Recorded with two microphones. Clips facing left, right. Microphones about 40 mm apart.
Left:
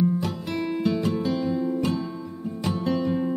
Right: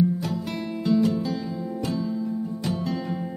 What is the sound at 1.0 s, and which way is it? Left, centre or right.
Music, centre.